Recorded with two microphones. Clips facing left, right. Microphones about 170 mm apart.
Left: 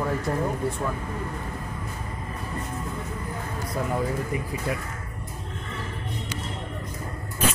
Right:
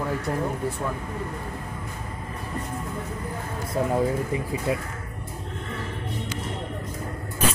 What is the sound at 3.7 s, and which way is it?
Speech, 25° right (ahead or behind).